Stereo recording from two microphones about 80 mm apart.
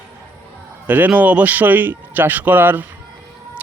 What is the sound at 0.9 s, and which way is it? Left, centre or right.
Speech, right.